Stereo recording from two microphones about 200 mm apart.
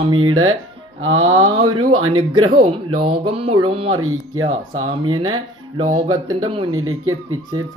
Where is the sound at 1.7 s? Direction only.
90° right.